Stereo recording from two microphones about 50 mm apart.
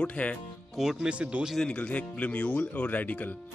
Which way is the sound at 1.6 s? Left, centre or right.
Left.